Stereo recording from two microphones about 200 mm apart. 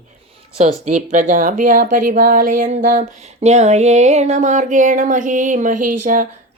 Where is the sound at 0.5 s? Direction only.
35° right (ahead or behind).